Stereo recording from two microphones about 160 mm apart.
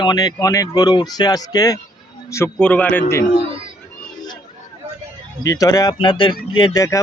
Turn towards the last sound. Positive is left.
turn(degrees=20)  # may be behind; listen again after turning